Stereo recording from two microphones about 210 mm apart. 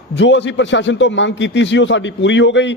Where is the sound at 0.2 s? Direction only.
60° left (ahead or behind).